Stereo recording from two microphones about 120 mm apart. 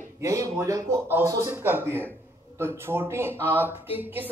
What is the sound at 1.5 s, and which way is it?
A man's voice, 15° right (ahead or behind).